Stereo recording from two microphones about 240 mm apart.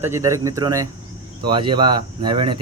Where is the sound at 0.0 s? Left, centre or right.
Centre.